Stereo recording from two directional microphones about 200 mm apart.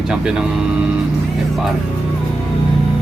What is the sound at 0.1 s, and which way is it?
Speech, 5° right (ahead or behind).